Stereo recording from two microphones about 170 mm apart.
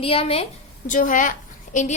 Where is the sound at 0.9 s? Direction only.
50° left (ahead or behind).